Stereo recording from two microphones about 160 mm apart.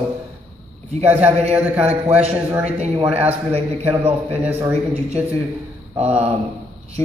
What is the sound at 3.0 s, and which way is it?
Speech, 10° right (ahead or behind).